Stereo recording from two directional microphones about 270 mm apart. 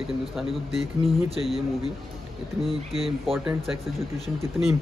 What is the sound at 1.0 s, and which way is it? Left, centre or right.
Speech, right.